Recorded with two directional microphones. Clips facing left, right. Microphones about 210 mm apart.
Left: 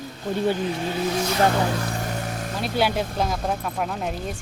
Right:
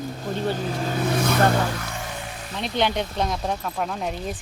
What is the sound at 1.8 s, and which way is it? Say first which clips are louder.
Vehicle: left 5 dB; 40° left (ahead or behind).